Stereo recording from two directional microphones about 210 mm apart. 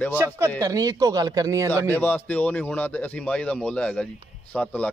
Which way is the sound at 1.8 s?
10° left (ahead or behind).